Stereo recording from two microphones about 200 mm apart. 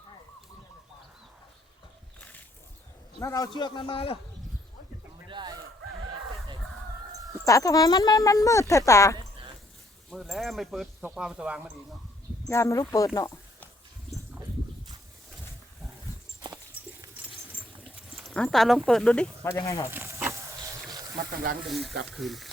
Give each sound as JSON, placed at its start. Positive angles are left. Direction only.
{"t": 3.2, "sound": "a man's voice", "side_deg": 15}
{"t": 5.3, "sound": "fowl", "side_deg": -20}
{"t": 7.4, "sound": "speech", "side_deg": 15}
{"t": 10.1, "sound": "speech", "side_deg": 0}
{"t": 12.5, "sound": "speech", "side_deg": 15}
{"t": 13.1, "sound": "a sound", "side_deg": 15}
{"t": 18.1, "sound": "speech", "side_deg": 0}
{"t": 19.9, "sound": "a sound", "side_deg": -10}
{"t": 21.7, "sound": "speech", "side_deg": 0}